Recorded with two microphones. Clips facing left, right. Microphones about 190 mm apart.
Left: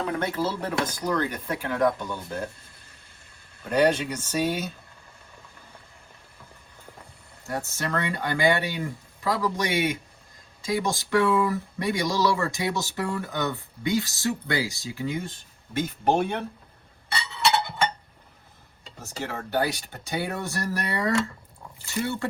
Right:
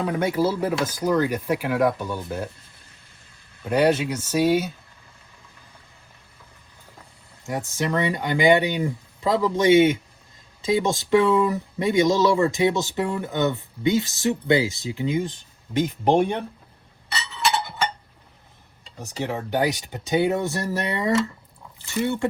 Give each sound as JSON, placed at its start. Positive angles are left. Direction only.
{"t": 0.2, "sound": "speech", "side_deg": -10}
{"t": 3.7, "sound": "speech", "side_deg": -10}
{"t": 7.4, "sound": "speech", "side_deg": -15}
{"t": 19.0, "sound": "speech", "side_deg": -15}